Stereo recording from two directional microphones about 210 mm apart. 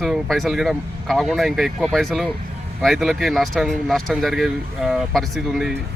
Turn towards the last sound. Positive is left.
turn(degrees=0)  # may be behind; listen again after turning